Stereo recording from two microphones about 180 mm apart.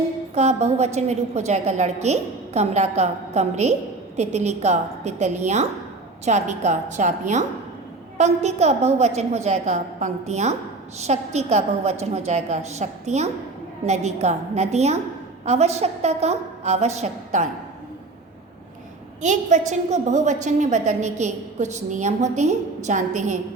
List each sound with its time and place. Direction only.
0.3 s a woman's voice: 40° right (ahead or behind)
19.2 s a woman's voice: 40° right (ahead or behind)